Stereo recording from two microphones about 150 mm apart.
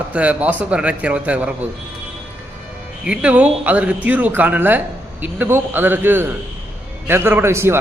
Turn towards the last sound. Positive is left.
turn(degrees=-15)  # may be behind; listen again after turning